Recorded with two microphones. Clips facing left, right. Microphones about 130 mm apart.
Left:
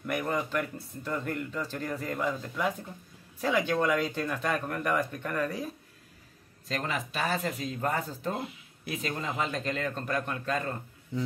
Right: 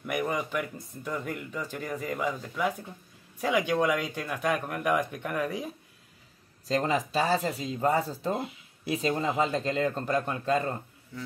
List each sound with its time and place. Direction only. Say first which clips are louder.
0.0 s speech: right 1 dB; 10° right (ahead or behind)
6.7 s speech: right 6 dB; 30° right (ahead or behind)
11.1 s a sound: left 7 dB; 20° left (ahead or behind)